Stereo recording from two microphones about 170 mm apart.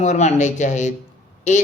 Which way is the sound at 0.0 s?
40° left (ahead or behind).